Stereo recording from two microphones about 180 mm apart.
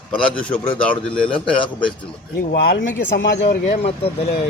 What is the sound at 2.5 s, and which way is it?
Speech, 70° left (ahead or behind).